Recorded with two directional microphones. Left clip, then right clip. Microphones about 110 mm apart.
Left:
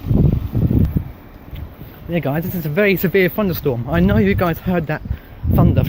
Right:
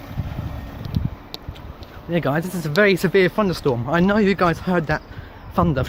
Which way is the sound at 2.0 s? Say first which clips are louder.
Even; 20° right (ahead or behind).